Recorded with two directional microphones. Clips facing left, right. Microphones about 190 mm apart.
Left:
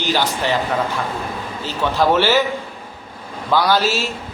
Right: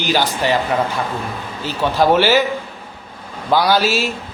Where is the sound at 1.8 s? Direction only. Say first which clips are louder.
Right 2 dB; 15° right (ahead or behind).